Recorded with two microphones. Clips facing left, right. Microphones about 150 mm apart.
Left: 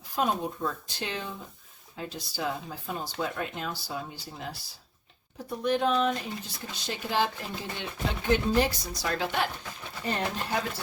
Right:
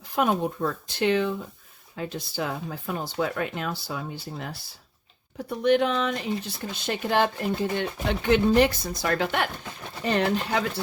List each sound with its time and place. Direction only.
0.2 s speech: 65° right (ahead or behind)
5.5 s speech: 75° right (ahead or behind); by 7.9 s 55° right (ahead or behind)
8.2 s speech: 80° right; by 9.5 s 60° right (ahead or behind)
10.0 s speech: 90° right